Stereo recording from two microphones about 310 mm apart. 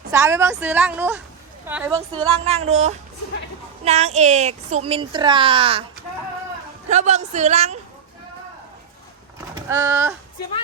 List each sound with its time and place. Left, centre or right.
0.1 s a woman's voice: centre
6.8 s a child's voice: right
9.6 s a woman's voice: centre